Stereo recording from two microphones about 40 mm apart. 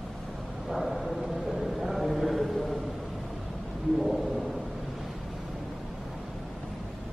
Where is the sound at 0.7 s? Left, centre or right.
Centre.